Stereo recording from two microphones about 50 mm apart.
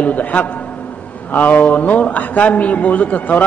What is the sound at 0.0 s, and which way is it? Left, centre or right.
A man's voice, left.